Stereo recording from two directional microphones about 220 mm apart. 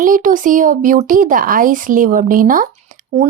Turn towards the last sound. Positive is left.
turn(degrees=-35)  # may be behind; listen again after turning